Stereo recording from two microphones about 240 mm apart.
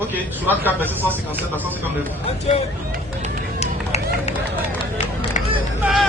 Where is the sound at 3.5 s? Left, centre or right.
Left.